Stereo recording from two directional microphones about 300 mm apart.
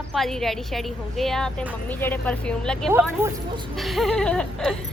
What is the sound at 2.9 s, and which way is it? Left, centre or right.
Speech, centre.